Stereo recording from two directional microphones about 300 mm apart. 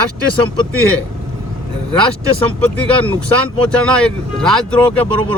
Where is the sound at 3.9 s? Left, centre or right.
Centre.